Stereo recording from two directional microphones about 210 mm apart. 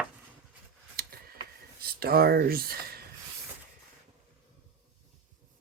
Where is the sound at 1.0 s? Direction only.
45° right (ahead or behind).